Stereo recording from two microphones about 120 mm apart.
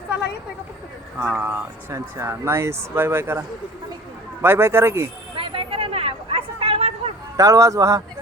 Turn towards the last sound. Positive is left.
turn(degrees=-25)  # may be behind; listen again after turning